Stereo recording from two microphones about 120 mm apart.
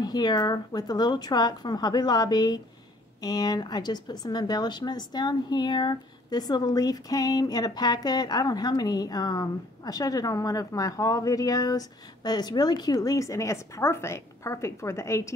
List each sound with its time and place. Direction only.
0.0 s speech: 35° left (ahead or behind)